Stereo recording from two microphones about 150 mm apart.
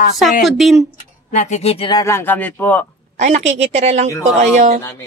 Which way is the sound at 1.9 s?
20° left (ahead or behind).